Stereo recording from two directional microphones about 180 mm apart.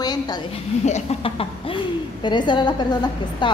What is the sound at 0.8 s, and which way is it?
A woman's voice, 40° left (ahead or behind).